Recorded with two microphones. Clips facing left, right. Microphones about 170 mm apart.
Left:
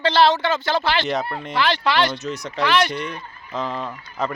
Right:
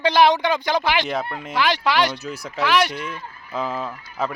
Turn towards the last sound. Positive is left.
turn(degrees=-5)  # may be behind; listen again after turning